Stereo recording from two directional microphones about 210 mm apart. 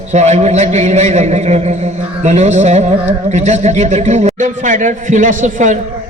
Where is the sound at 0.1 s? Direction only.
35° right (ahead or behind).